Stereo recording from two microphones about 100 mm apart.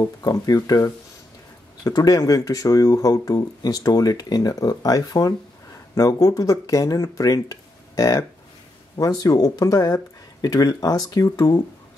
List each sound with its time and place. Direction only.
0.0 s speech: 35° left (ahead or behind)